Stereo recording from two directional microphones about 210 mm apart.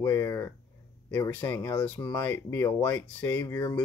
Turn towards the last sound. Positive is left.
turn(degrees=15)  # may be behind; listen again after turning